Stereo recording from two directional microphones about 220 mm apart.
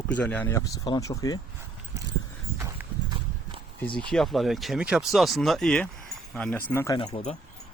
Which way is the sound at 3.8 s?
5° left (ahead or behind).